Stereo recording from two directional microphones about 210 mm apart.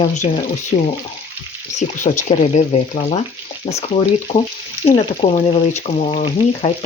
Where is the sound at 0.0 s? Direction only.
35° left (ahead or behind).